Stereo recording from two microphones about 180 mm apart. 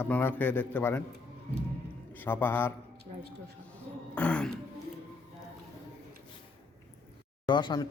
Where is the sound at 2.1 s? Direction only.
10° left (ahead or behind).